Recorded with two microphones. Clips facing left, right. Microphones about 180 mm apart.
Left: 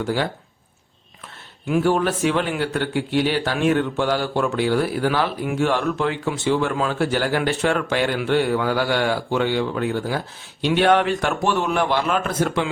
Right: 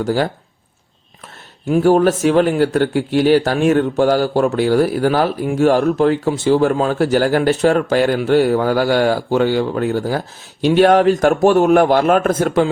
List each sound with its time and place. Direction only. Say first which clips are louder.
0.0 s speech: right 5 dB; 40° right (ahead or behind)
1.6 s speech: right 7 dB; 40° right (ahead or behind)